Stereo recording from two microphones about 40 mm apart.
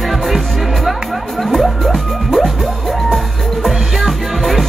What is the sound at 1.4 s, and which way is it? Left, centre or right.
Music, centre.